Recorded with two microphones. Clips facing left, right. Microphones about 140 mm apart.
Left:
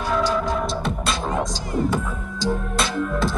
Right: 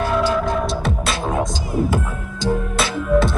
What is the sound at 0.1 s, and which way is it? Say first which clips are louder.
Music: left 1 dB; centre (ahead or behind).